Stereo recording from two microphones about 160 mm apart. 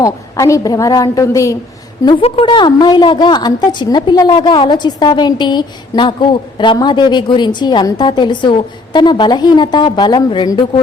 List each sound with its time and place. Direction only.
0.0 s a woman's voice: 20° left (ahead or behind)
2.0 s a woman's voice: 35° left (ahead or behind)